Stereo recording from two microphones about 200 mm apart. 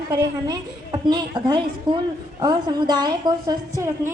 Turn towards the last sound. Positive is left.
turn(degrees=-15)  # may be behind; listen again after turning